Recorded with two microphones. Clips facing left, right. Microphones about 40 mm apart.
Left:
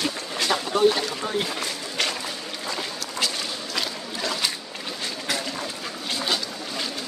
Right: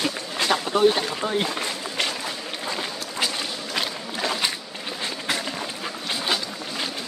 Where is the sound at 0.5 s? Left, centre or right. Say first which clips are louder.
Right 1 dB; right.